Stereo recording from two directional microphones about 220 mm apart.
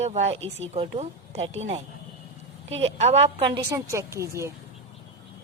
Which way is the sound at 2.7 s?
30° right (ahead or behind).